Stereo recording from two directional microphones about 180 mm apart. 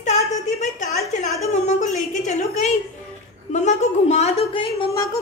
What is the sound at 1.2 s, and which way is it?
A woman's voice, 40° left (ahead or behind).